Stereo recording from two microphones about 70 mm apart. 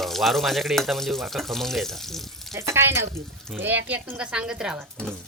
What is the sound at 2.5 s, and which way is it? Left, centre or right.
Speech, right.